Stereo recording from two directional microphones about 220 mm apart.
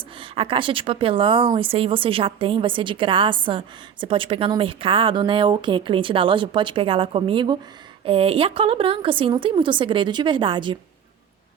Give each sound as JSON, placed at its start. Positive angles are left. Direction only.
{"t": 0.2, "sound": "speech", "side_deg": -25}